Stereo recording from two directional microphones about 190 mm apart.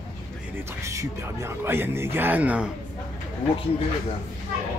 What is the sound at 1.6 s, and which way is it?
Speech, 10° right (ahead or behind).